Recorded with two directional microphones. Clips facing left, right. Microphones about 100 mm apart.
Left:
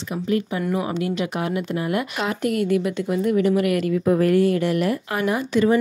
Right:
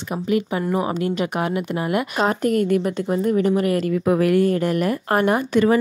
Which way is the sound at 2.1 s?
40° right (ahead or behind).